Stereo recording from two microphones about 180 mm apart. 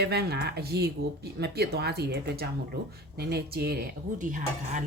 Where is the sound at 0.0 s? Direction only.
65° right (ahead or behind).